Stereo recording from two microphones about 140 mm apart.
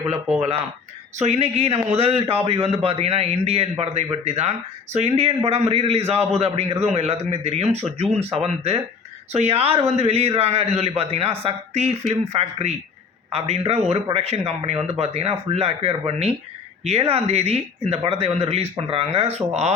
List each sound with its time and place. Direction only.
1.2 s a man's voice: 50° right (ahead or behind)